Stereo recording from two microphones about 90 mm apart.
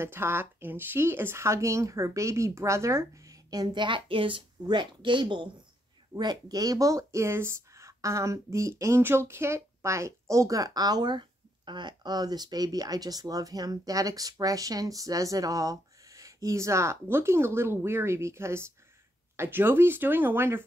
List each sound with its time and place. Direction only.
0.0 s speech: 25° right (ahead or behind)
3.4 s a woman's voice: 55° right (ahead or behind)
6.1 s speech: 45° right (ahead or behind); by 20.6 s 25° right (ahead or behind)